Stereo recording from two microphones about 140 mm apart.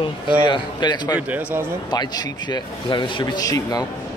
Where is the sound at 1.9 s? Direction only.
30° left (ahead or behind).